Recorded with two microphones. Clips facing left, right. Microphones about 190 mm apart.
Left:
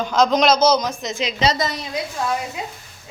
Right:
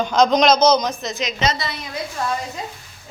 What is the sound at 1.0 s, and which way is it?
Speech, 25° left (ahead or behind).